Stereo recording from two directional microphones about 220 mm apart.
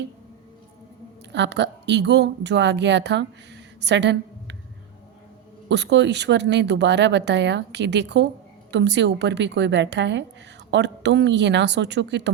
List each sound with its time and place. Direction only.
1.3 s speech: 50° right (ahead or behind)
3.8 s a sound: 50° right (ahead or behind)
5.6 s speech: 50° right (ahead or behind)